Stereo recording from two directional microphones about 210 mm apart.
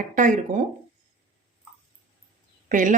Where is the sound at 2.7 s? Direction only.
40° right (ahead or behind).